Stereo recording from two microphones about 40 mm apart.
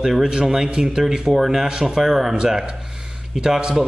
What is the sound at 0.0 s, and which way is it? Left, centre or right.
A man's voice, centre.